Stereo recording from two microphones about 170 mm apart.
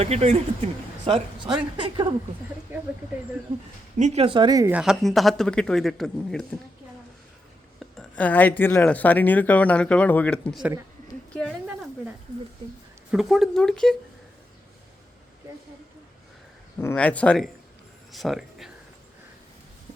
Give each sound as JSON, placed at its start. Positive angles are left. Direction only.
{"t": 0.0, "sound": "a woman's voice", "side_deg": -40}
{"t": 2.7, "sound": "speech", "side_deg": -15}
{"t": 3.9, "sound": "speech", "side_deg": -40}
{"t": 4.7, "sound": "a man's voice", "side_deg": -5}
{"t": 7.8, "sound": "speech", "side_deg": 5}
{"t": 12.6, "sound": "speech", "side_deg": -30}
{"t": 13.1, "sound": "a man's voice", "side_deg": 0}
{"t": 16.8, "sound": "speech", "side_deg": 10}
{"t": 18.1, "sound": "a sound", "side_deg": 0}